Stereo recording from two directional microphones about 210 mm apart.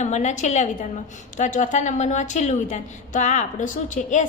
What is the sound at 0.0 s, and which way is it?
A woman's voice, 35° left (ahead or behind).